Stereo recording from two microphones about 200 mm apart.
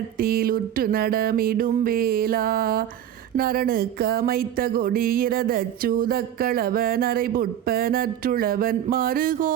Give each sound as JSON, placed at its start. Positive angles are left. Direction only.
{"t": 0.2, "sound": "speech", "side_deg": -45}